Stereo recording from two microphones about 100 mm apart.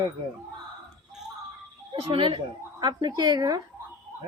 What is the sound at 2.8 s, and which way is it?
Speech, 45° right (ahead or behind).